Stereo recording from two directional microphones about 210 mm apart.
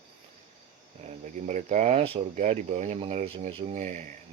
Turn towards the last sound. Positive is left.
turn(degrees=-35)  # may be behind; listen again after turning